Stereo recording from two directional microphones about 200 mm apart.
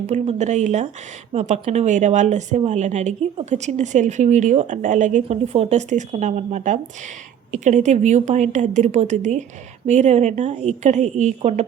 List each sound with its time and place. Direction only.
0.1 s a woman's voice: 35° right (ahead or behind)